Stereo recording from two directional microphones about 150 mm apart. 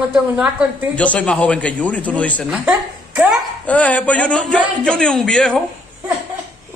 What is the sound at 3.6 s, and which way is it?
A man's voice, 10° left (ahead or behind).